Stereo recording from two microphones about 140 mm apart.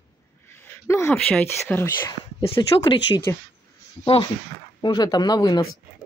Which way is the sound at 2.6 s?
30° left (ahead or behind).